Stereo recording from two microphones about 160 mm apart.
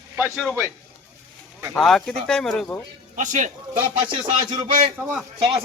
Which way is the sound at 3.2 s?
50° right (ahead or behind).